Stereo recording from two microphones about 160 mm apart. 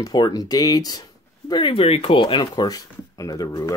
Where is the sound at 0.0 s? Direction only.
25° left (ahead or behind).